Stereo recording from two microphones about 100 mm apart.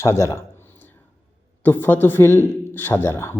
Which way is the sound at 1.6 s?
20° left (ahead or behind).